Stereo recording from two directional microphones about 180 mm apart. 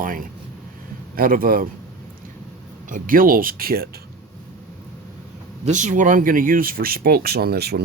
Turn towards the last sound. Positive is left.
turn(degrees=-60)  # may be behind; listen again after turning